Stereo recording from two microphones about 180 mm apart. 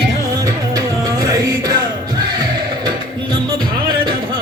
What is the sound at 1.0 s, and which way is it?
Music, 20° right (ahead or behind).